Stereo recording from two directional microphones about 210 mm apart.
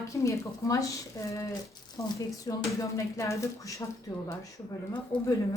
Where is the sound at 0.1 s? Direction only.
15° left (ahead or behind).